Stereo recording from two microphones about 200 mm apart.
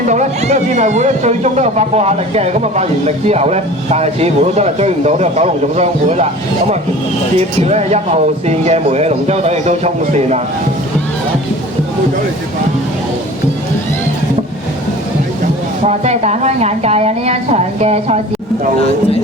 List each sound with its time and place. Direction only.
0.1 s speech: 35° right (ahead or behind)
15.8 s speech: 35° right (ahead or behind)